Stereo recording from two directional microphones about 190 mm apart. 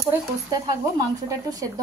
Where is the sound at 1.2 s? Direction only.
20° right (ahead or behind).